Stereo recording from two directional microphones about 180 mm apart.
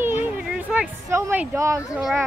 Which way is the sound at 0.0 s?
10° right (ahead or behind).